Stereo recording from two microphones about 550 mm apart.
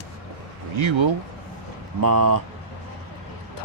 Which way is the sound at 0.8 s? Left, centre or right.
Right.